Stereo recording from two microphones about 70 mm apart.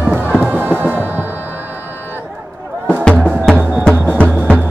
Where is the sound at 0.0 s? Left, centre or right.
Right.